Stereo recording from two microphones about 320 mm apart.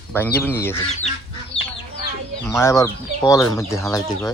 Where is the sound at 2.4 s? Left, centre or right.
Centre.